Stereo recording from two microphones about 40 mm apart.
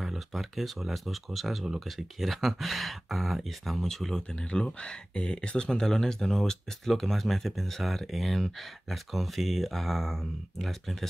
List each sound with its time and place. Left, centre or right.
0.0 s speech: centre
3.8 s speech: centre
5.7 s speech: centre